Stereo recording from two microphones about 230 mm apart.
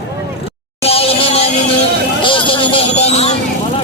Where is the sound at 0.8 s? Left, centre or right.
Left.